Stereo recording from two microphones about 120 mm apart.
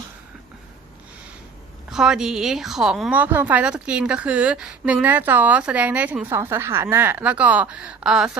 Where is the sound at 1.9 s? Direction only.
5° right (ahead or behind).